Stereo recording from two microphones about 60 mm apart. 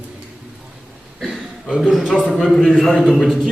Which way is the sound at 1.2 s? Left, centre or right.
Centre.